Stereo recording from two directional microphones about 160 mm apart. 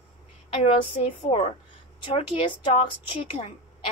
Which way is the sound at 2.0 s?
30° left (ahead or behind).